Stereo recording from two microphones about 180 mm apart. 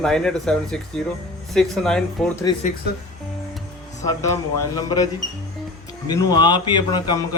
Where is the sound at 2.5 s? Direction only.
20° left (ahead or behind).